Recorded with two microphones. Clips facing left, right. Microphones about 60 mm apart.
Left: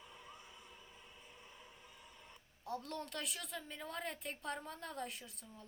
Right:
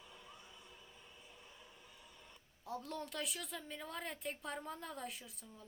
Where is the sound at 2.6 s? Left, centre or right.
Centre.